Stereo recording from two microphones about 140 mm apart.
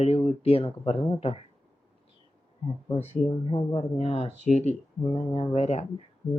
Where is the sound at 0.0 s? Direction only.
50° left (ahead or behind).